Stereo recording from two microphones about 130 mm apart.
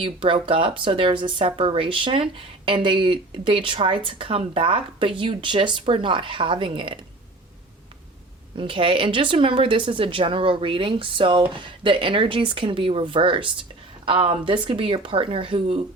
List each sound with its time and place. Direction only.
0.0 s speech: 40° right (ahead or behind)
8.5 s speech: 40° right (ahead or behind)